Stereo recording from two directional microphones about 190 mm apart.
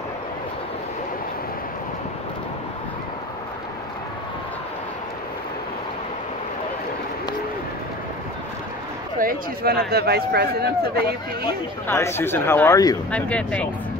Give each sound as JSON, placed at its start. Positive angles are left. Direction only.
{"t": 9.2, "sound": "a man's voice", "side_deg": -50}
{"t": 11.4, "sound": "speech", "side_deg": 15}
{"t": 13.1, "sound": "speech", "side_deg": 5}